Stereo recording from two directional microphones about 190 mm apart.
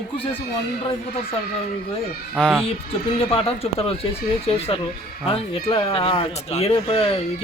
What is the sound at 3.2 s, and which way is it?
Speech, 30° left (ahead or behind).